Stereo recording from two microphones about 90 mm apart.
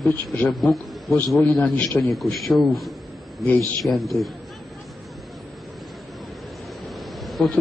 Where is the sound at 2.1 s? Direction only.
Centre (ahead or behind).